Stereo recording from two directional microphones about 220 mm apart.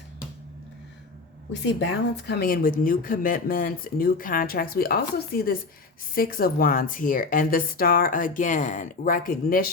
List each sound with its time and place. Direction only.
1.6 s speech: 50° left (ahead or behind)